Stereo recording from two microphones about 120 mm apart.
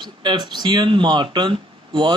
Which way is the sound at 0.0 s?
40° right (ahead or behind).